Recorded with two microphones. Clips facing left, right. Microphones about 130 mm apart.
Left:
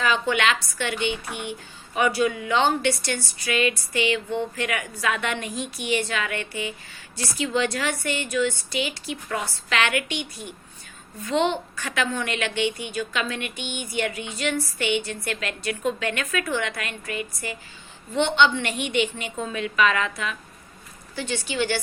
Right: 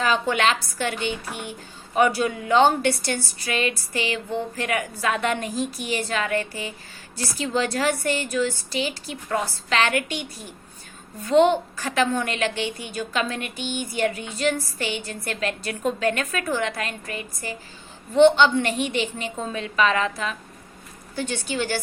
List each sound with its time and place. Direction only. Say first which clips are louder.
0.0 s speech: right 1 dB; 40° right (ahead or behind)
21.2 s a woman's voice: even; 50° right (ahead or behind)